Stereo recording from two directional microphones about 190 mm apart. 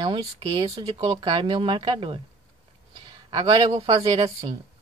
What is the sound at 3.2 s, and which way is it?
Speech, 20° right (ahead or behind).